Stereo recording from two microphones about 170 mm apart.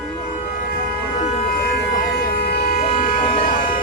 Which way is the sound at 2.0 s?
60° left (ahead or behind).